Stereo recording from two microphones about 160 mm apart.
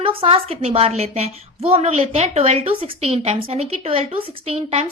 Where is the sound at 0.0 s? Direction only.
35° right (ahead or behind).